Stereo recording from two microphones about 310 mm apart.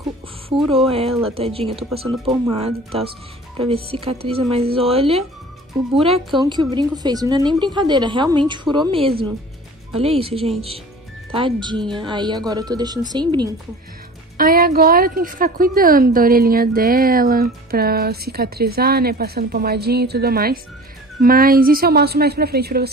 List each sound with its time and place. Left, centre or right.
0.6 s speech: centre
0.8 s a woman's voice: centre
6.4 s a woman's voice: centre
14.3 s a woman's voice: right